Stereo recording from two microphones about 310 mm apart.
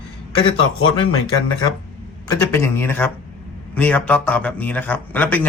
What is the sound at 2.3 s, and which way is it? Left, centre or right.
Speech, centre.